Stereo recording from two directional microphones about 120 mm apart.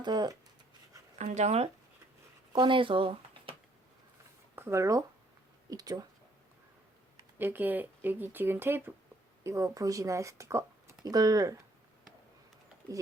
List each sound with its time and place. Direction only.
0.0 s speech: 35° right (ahead or behind)
1.2 s speech: 75° right (ahead or behind)
2.5 s speech: 40° right (ahead or behind)
4.5 s speech: 20° right (ahead or behind)
7.3 s speech: 15° right (ahead or behind); by 11.5 s 30° right (ahead or behind)